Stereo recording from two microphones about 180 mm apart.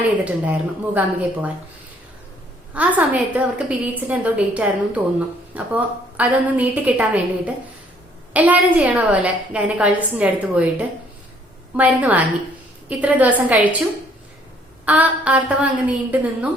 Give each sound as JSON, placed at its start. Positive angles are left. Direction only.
{"t": 0.0, "sound": "a woman's voice", "side_deg": -10}
{"t": 2.7, "sound": "a woman's voice", "side_deg": -10}
{"t": 14.8, "sound": "a woman's voice", "side_deg": -5}